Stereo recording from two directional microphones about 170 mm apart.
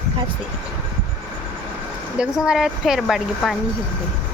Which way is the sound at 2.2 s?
5° right (ahead or behind).